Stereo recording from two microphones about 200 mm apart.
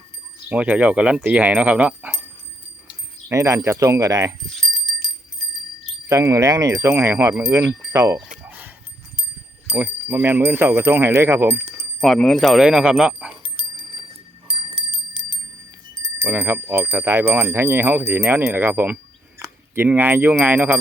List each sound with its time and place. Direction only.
0.4 s speech: 5° right (ahead or behind)
2.8 s wind chime: 15° right (ahead or behind)
4.5 s bicycle bell: centre (ahead or behind)
6.1 s speech: 15° right (ahead or behind)
8.4 s dog: 10° right (ahead or behind)
9.6 s speech: 10° right (ahead or behind)
11.9 s speech: centre (ahead or behind)
13.3 s bell: 25° right (ahead or behind)
14.7 s wind chime: 25° right (ahead or behind)
16.2 s speech: 10° right (ahead or behind)